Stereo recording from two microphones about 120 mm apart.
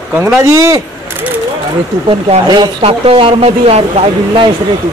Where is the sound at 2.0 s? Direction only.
40° right (ahead or behind).